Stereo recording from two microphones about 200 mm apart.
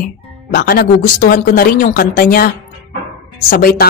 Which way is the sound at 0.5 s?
45° left (ahead or behind).